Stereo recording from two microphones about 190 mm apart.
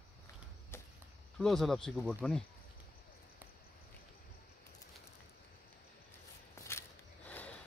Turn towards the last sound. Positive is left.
turn(degrees=10)  # may be behind; listen again after turning